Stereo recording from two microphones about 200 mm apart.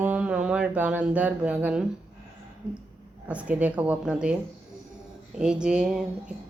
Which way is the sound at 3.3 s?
5° right (ahead or behind).